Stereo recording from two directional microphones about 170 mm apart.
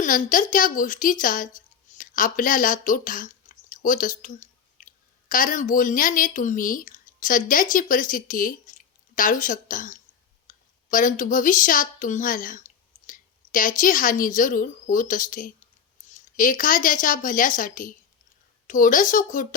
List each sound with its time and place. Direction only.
0.0 s a woman's voice: 50° left (ahead or behind)